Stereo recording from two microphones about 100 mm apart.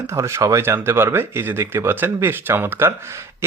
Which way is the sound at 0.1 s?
30° right (ahead or behind).